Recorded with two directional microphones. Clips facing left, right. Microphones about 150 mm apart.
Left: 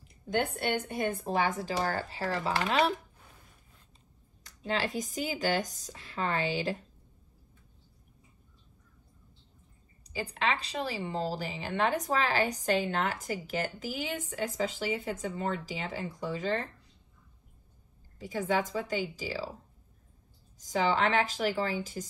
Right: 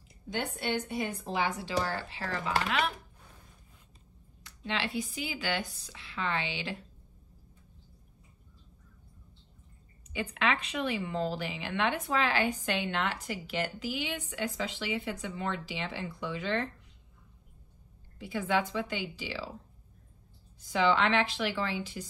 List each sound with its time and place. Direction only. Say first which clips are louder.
0.3 s speech: left 3 dB; 50° left (ahead or behind); by 2.9 s 35° left (ahead or behind)
4.4 s speech: left 3 dB; 40° left (ahead or behind)
10.1 s speech: right 1 dB; 35° left (ahead or behind)
18.2 s speech: even; 40° left (ahead or behind)
20.5 s speech: right 1 dB; 40° left (ahead or behind)